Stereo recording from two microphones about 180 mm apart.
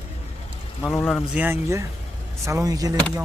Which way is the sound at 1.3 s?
10° right (ahead or behind).